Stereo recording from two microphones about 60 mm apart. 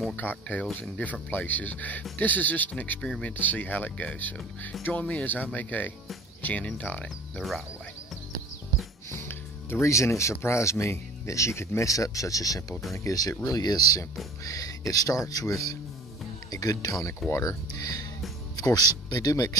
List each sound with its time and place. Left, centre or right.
0.1 s speech: left
7.3 s frog: centre
9.1 s music: left
9.8 s speech: left
11.9 s speech: left
14.4 s speech: left